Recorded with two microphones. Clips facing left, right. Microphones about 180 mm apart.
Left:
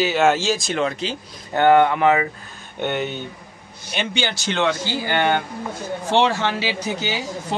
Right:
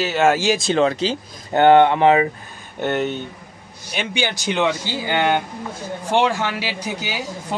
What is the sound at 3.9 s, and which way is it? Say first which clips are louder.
Speech: right 1 dB; 10° right (ahead or behind).